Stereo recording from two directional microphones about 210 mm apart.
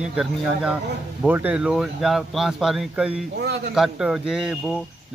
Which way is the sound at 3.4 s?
55° right (ahead or behind).